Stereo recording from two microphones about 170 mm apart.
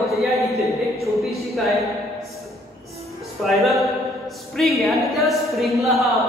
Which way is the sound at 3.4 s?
Centre (ahead or behind).